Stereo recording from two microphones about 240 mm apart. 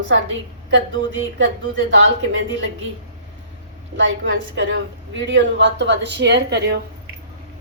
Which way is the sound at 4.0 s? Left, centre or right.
Right.